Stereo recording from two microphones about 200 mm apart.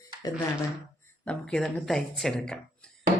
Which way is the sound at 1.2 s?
5° left (ahead or behind).